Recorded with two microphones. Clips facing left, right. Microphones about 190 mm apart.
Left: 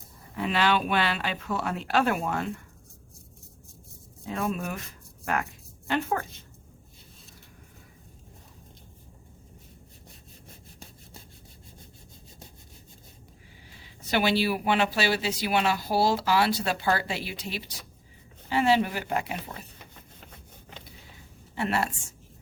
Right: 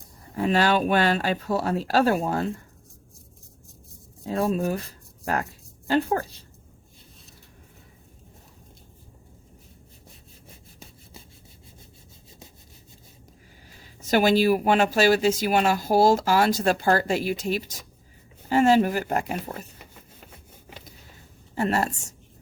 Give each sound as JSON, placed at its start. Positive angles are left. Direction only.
{"t": 0.3, "sound": "speech", "side_deg": -45}
{"t": 4.3, "sound": "speech", "side_deg": -35}
{"t": 13.8, "sound": "speech", "side_deg": -45}
{"t": 21.5, "sound": "speech", "side_deg": -40}